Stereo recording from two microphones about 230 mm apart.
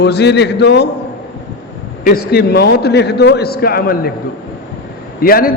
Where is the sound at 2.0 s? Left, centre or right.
Left.